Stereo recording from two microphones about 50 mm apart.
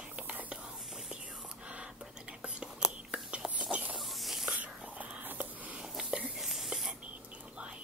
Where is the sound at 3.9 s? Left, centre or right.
Centre.